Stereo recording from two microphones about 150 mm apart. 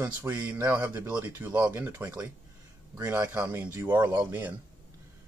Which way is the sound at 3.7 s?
30° right (ahead or behind).